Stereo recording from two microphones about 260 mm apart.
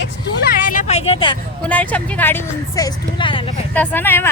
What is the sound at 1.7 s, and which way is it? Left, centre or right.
Speech, centre.